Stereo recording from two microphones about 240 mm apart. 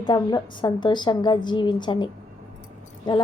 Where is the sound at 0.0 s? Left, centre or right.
Centre.